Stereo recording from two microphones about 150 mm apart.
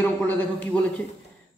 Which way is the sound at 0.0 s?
10° left (ahead or behind).